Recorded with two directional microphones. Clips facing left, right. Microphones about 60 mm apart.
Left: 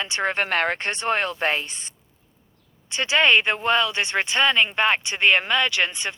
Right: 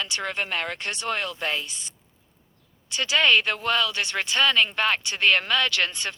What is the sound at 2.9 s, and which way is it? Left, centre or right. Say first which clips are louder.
Speech: left 2 dB; left.